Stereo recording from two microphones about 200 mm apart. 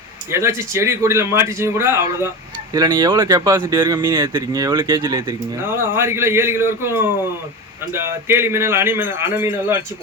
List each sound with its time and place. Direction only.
0.3 s speech: 15° right (ahead or behind)